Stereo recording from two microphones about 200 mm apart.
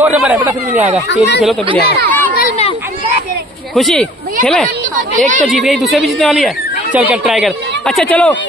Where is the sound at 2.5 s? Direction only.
30° left (ahead or behind).